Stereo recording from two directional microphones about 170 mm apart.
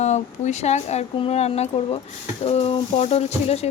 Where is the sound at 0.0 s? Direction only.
40° left (ahead or behind).